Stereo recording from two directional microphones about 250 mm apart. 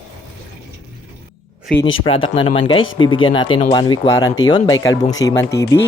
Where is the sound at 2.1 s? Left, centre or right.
Left.